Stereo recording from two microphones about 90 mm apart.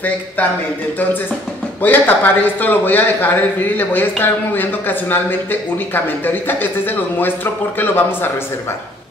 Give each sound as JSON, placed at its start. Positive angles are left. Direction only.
{"t": 1.8, "sound": "a man's voice", "side_deg": 20}